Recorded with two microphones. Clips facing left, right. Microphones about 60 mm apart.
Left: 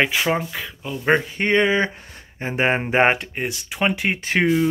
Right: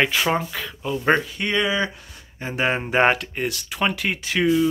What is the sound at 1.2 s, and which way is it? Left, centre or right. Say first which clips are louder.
Speech: left 4 dB; left.